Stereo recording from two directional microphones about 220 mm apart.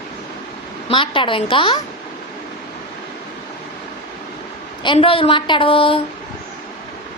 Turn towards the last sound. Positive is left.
turn(degrees=25)  # may be behind; listen again after turning